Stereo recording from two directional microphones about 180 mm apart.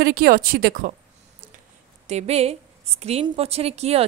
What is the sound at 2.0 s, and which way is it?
A woman's voice, 35° right (ahead or behind).